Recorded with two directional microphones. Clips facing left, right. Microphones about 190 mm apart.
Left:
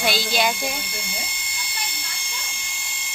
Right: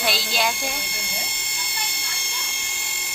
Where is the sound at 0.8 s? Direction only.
60° right (ahead or behind).